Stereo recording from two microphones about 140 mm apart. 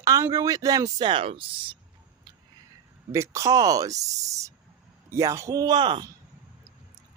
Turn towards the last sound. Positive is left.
turn(degrees=-35)  # may be behind; listen again after turning